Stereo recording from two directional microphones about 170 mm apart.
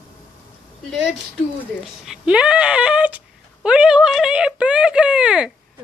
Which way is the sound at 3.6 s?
5° right (ahead or behind).